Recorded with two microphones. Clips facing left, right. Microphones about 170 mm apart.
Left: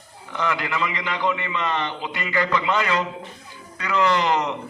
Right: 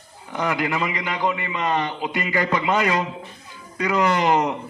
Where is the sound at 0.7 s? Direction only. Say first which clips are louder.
Right 1 dB; 30° right (ahead or behind).